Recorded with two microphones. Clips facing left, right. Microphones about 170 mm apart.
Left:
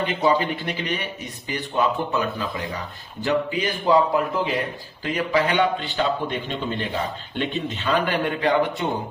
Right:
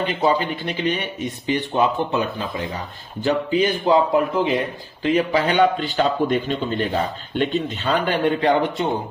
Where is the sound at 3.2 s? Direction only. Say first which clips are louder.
Right 4 dB; 25° right (ahead or behind).